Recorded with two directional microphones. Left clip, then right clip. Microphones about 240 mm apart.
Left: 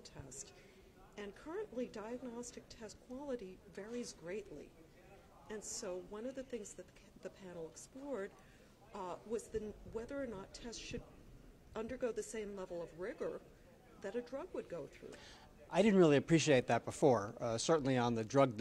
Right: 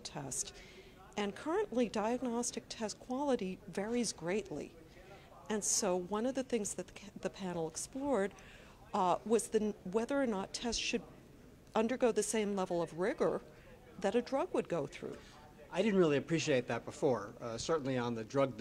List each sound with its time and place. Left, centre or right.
0.0 s a woman's voice: right
15.7 s a man's voice: left